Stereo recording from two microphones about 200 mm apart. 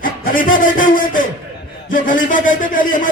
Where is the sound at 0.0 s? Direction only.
45° left (ahead or behind).